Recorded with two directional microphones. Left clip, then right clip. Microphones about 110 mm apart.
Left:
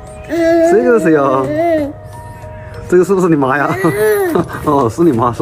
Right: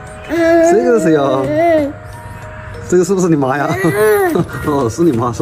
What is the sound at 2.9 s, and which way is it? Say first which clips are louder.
Speech: left 2 dB; 10° right (ahead or behind).